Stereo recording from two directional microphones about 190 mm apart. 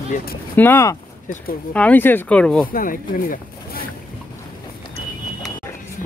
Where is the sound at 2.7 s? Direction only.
45° left (ahead or behind).